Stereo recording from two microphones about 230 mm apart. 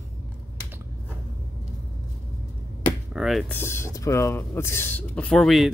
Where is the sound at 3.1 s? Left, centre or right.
Centre.